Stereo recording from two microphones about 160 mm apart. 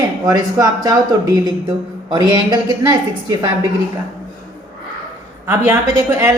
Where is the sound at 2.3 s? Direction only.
25° right (ahead or behind).